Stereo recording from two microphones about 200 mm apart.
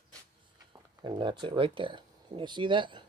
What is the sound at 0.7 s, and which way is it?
Speech, 20° right (ahead or behind).